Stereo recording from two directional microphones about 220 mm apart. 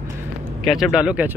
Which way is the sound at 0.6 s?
Centre (ahead or behind).